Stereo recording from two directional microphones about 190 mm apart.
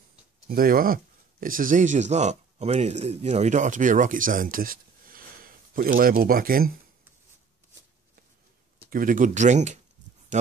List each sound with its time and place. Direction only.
0.5 s speech: 50° right (ahead or behind)
8.9 s speech: 45° right (ahead or behind)